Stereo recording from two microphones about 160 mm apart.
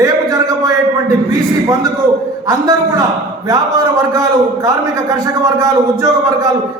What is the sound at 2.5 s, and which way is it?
A man's voice, 20° right (ahead or behind).